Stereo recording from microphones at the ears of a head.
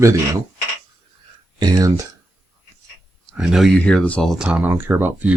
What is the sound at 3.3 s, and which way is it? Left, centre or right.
Speech, centre.